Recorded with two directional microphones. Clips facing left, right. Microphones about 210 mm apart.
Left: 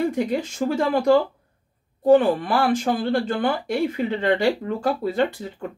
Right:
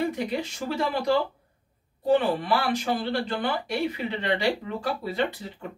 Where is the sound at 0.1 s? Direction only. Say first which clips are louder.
Left 5 dB; 50° left (ahead or behind).